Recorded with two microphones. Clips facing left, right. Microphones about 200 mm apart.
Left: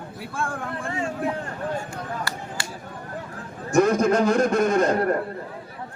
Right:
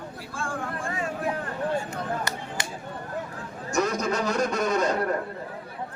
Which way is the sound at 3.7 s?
50° left (ahead or behind).